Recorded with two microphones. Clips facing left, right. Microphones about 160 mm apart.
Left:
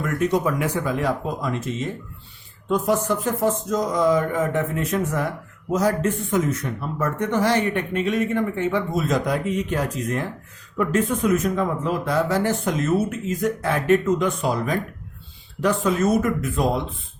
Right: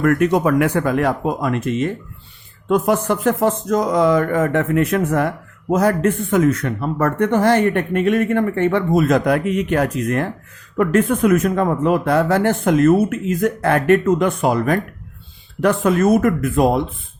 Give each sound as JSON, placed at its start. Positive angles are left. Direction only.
{"t": 0.0, "sound": "speech", "side_deg": -65}